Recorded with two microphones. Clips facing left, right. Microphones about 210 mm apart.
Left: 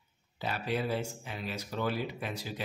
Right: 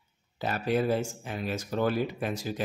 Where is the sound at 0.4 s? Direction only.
45° right (ahead or behind).